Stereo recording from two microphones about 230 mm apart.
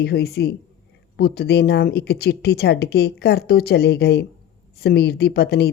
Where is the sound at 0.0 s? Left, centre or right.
Left.